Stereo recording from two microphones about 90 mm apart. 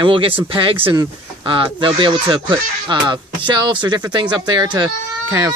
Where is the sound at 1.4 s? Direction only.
70° right (ahead or behind).